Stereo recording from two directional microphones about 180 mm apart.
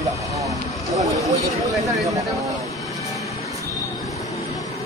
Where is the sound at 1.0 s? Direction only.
20° right (ahead or behind).